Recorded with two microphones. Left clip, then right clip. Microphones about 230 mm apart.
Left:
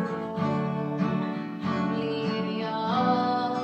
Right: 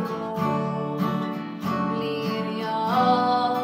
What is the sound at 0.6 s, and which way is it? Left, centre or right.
Music, right.